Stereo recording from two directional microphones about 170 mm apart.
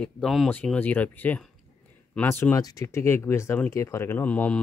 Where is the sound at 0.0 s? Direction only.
Centre (ahead or behind).